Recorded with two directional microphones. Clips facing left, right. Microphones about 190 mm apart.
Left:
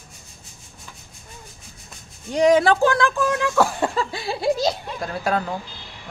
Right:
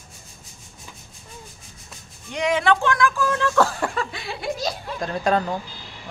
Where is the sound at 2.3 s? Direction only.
40° left (ahead or behind).